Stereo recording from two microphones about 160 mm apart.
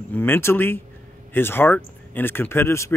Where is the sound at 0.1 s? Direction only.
10° left (ahead or behind).